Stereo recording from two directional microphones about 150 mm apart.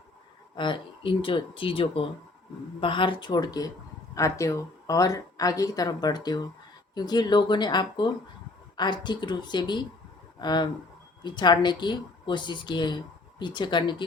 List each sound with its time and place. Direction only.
0.5 s speech: 35° left (ahead or behind)